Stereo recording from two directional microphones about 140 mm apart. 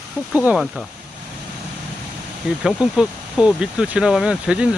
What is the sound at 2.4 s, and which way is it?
Speech, 5° right (ahead or behind).